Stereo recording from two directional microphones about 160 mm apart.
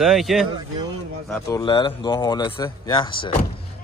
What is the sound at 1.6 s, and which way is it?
Speech, 30° left (ahead or behind).